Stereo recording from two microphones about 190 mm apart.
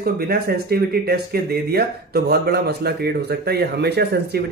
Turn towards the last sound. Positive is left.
turn(degrees=-60)  # may be behind; listen again after turning